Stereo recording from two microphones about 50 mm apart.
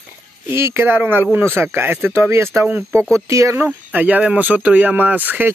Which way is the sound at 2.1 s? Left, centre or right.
Right.